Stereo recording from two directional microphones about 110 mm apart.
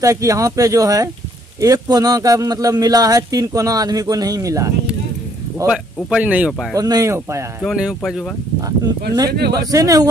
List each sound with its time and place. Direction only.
0.0 s speech: 30° right (ahead or behind)
6.0 s speech: 10° right (ahead or behind)
6.7 s speech: 35° right (ahead or behind)
8.5 s speech: 35° right (ahead or behind)